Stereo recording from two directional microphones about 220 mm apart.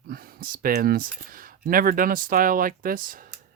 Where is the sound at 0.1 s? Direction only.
40° right (ahead or behind).